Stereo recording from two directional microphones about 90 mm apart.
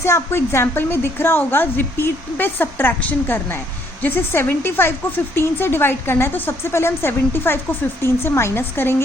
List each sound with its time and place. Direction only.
0.0 s speech: 30° left (ahead or behind)